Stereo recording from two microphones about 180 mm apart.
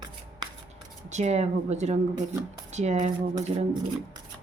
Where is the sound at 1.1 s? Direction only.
40° right (ahead or behind).